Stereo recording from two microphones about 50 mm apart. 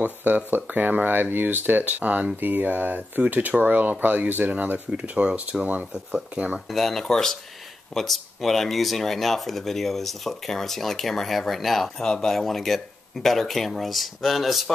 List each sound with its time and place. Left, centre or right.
0.0 s speech: right
6.7 s speech: centre